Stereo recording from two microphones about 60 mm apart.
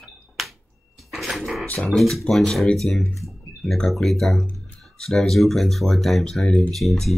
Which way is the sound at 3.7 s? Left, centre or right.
Centre.